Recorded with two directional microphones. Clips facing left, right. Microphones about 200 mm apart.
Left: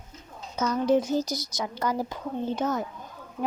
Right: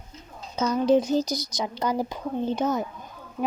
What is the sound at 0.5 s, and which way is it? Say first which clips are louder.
Speech: right 2 dB; 15° right (ahead or behind).